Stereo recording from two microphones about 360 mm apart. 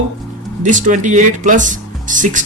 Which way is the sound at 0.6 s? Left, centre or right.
Right.